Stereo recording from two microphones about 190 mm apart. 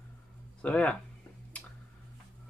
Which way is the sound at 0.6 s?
5° left (ahead or behind).